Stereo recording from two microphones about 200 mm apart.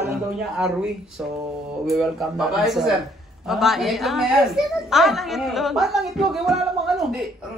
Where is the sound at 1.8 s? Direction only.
Centre (ahead or behind).